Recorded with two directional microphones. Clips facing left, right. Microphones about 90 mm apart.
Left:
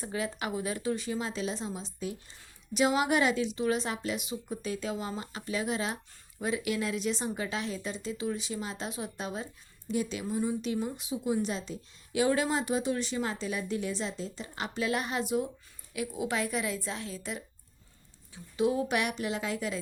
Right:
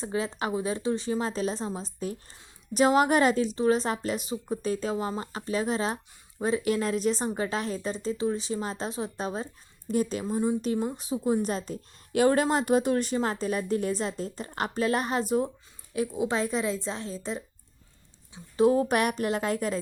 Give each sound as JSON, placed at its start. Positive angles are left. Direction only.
{"t": 0.0, "sound": "a woman's voice", "side_deg": -30}
{"t": 18.5, "sound": "a woman's voice", "side_deg": -40}